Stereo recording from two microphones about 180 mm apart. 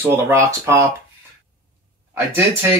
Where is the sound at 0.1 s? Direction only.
15° right (ahead or behind).